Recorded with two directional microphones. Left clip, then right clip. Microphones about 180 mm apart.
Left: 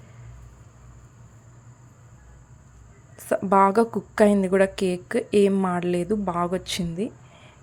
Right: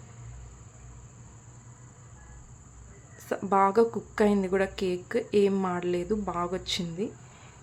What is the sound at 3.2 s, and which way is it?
A woman's voice, 20° left (ahead or behind).